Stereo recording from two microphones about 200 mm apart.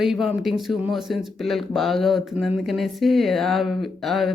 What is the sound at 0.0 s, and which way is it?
Speech, centre (ahead or behind).